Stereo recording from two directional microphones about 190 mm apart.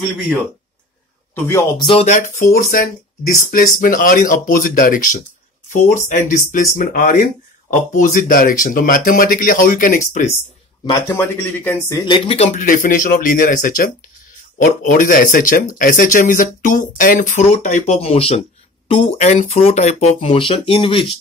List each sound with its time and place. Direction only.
1.3 s speech: 15° left (ahead or behind)
1.9 s speech: 35° left (ahead or behind)
11.1 s speech: 10° left (ahead or behind)
12.1 s speech: 30° left (ahead or behind)